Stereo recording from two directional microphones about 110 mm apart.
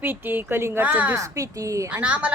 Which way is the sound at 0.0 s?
20° right (ahead or behind).